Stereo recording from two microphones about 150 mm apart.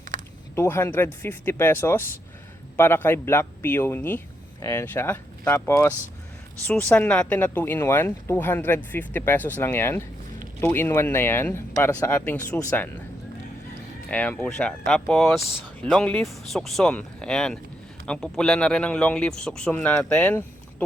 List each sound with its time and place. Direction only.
0.5 s speech: 15° left (ahead or behind)
14.1 s speech: 10° left (ahead or behind)